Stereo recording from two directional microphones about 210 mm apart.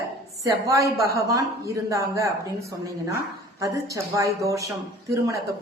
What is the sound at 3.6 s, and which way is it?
Speech, 15° right (ahead or behind).